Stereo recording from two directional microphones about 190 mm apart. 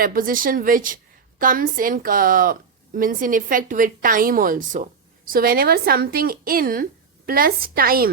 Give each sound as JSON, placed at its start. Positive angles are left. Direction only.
{"t": 0.0, "sound": "a woman's voice", "side_deg": -50}